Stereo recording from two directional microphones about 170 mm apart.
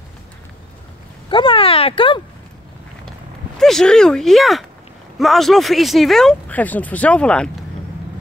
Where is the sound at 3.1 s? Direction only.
Centre (ahead or behind).